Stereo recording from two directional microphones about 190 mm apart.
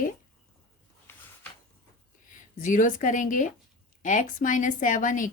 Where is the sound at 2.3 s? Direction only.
45° left (ahead or behind).